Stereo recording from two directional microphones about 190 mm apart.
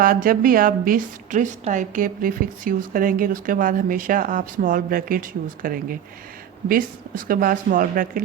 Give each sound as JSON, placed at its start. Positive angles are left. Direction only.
{"t": 0.0, "sound": "a woman's voice", "side_deg": -50}